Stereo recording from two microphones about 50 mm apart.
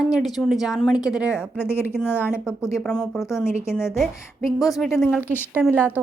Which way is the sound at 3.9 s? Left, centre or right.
Centre.